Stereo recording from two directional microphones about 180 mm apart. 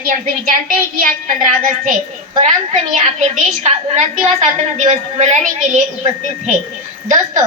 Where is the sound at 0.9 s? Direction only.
45° right (ahead or behind).